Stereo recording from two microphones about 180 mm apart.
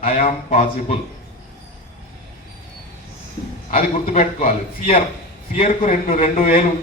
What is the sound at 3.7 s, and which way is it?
A man's voice, 50° left (ahead or behind).